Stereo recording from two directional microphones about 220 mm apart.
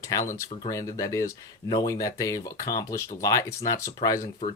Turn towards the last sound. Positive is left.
turn(degrees=15)  # may be behind; listen again after turning